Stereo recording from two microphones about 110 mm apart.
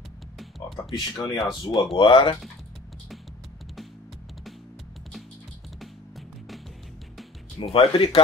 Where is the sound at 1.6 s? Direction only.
45° left (ahead or behind).